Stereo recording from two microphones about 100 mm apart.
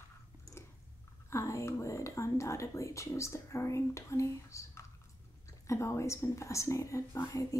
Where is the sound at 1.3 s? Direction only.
30° left (ahead or behind).